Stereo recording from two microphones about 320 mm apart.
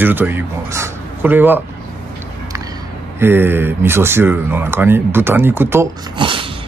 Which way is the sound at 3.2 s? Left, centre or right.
Centre.